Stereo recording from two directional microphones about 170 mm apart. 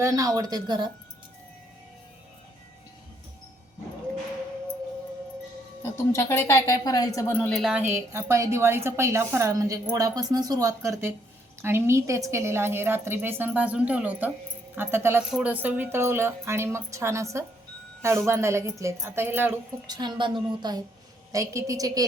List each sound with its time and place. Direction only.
0.0 s a woman's voice: 20° right (ahead or behind)
5.8 s speech: 15° left (ahead or behind); by 19.5 s 10° right (ahead or behind)
19.9 s a woman's voice: 25° right (ahead or behind)